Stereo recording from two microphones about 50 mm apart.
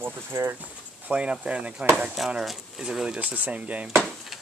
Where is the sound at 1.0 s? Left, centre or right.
Right.